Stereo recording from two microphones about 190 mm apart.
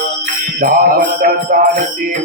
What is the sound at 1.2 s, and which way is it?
Music, 50° right (ahead or behind).